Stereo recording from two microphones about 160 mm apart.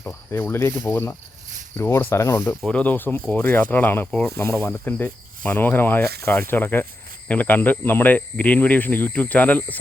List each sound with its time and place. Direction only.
0.0 s speech: 15° left (ahead or behind)